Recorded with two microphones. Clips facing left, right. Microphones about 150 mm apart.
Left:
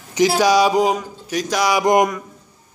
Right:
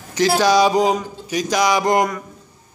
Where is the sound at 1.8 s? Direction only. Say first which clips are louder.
Left 2 dB; 15° left (ahead or behind).